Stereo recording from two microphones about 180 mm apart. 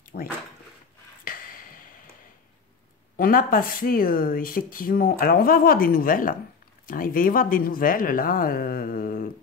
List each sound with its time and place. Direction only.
0.1 s speech: 60° left (ahead or behind)
1.2 s a sound: 50° left (ahead or behind)
3.2 s speech: 50° left (ahead or behind)